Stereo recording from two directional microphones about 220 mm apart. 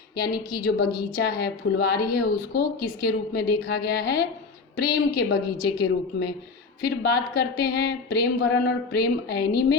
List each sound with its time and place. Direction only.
0.2 s a woman's voice: 45° left (ahead or behind)